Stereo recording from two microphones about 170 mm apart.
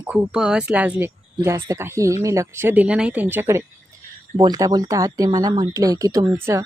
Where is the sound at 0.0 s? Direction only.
5° right (ahead or behind).